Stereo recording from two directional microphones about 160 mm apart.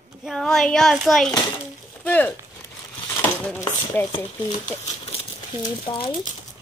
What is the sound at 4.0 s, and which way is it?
Speech, 15° left (ahead or behind).